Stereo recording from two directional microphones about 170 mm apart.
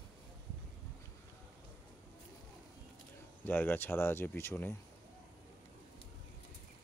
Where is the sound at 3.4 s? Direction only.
10° left (ahead or behind).